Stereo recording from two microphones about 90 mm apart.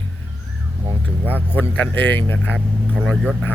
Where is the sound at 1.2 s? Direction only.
20° right (ahead or behind).